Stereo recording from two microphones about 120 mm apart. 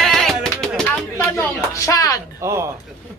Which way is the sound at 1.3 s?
25° left (ahead or behind).